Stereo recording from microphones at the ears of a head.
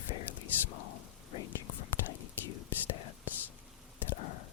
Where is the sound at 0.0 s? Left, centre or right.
Left.